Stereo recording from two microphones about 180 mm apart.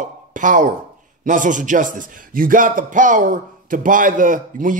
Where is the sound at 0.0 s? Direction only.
45° right (ahead or behind).